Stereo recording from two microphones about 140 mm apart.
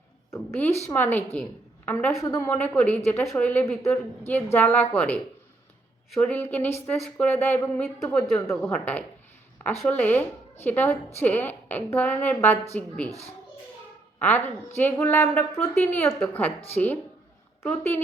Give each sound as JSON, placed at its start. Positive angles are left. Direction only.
{"t": 0.3, "sound": "a woman's voice", "side_deg": 10}
{"t": 14.2, "sound": "a woman's voice", "side_deg": 10}